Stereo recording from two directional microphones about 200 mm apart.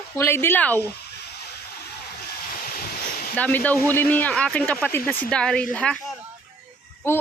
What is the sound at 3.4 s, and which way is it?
Speech, 5° left (ahead or behind).